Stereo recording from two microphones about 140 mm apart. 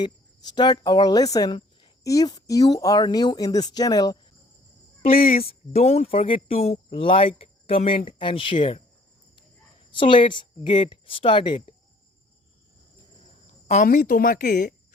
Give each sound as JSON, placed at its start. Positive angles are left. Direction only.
{"t": 0.5, "sound": "speech", "side_deg": 30}
{"t": 5.5, "sound": "speech", "side_deg": 50}
{"t": 10.0, "sound": "speech", "side_deg": 35}
{"t": 13.7, "sound": "a woman's voice", "side_deg": 75}